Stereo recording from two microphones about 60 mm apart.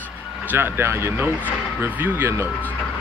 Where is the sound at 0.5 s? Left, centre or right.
Right.